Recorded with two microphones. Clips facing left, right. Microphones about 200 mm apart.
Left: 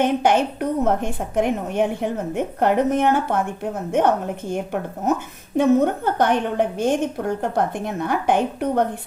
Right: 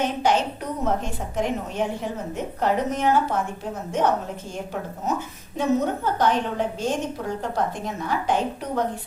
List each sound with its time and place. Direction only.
0.0 s a woman's voice: 55° left (ahead or behind)